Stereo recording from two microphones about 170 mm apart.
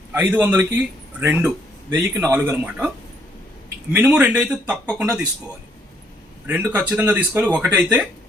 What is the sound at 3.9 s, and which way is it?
Speech, 10° right (ahead or behind).